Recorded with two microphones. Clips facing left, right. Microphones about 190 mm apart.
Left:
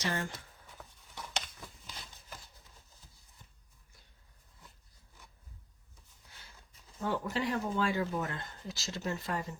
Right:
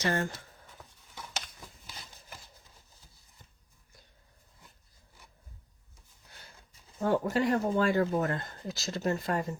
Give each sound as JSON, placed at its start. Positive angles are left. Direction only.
{"t": 0.0, "sound": "speech", "side_deg": -50}
{"t": 0.8, "sound": "a sound", "side_deg": 0}
{"t": 7.0, "sound": "speech", "side_deg": -50}